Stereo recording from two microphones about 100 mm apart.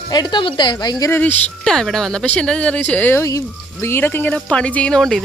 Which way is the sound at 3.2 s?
30° left (ahead or behind).